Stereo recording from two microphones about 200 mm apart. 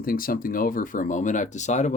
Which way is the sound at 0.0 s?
45° left (ahead or behind).